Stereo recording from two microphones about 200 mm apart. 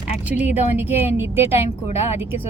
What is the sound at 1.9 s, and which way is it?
Speech, 30° left (ahead or behind).